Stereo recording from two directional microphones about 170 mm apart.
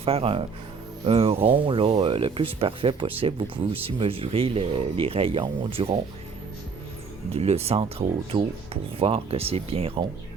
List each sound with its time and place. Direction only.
0.0 s speech: 35° right (ahead or behind)
7.3 s speech: 35° right (ahead or behind)